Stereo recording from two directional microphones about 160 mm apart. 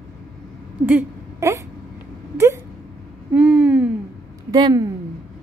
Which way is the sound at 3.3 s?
10° right (ahead or behind).